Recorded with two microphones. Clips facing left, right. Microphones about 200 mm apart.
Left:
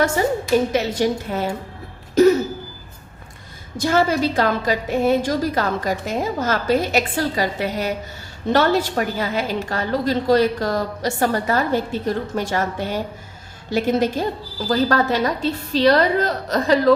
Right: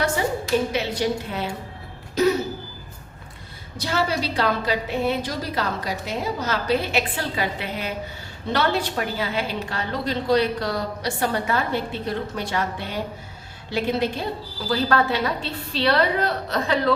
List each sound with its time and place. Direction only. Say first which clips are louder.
0.7 s a woman's voice: left 4 dB; 45° left (ahead or behind)
3.8 s a woman's voice: left 6 dB; 50° left (ahead or behind)